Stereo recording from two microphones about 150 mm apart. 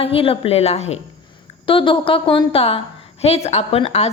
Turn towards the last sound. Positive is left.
turn(degrees=45)  # may be behind; listen again after turning